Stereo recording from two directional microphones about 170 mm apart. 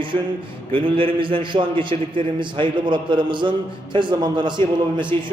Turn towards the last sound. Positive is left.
turn(degrees=-30)  # may be behind; listen again after turning